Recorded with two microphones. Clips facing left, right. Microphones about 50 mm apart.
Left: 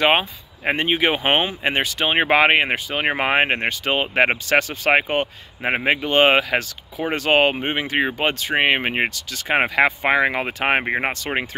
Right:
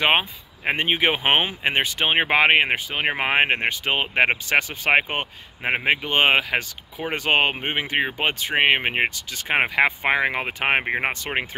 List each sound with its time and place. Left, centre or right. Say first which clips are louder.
0.0 s speech: left 2 dB; centre
2.1 s speech: left 2 dB; centre
4.1 s speech: left 1 dB; centre
4.5 s speech: left 2 dB; centre
5.6 s speech: left 2 dB; centre
5.9 s speech: left 3 dB; centre